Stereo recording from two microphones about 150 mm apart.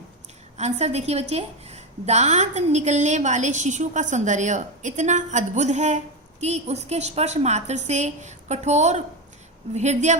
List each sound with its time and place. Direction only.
0.5 s a woman's voice: 45° right (ahead or behind)